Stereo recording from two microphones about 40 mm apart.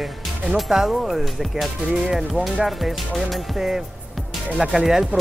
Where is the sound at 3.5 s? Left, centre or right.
Centre.